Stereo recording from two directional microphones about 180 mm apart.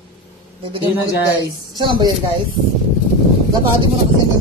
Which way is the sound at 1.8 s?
25° right (ahead or behind).